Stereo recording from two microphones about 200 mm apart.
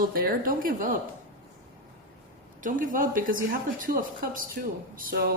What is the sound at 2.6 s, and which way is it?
A woman's voice, 40° right (ahead or behind).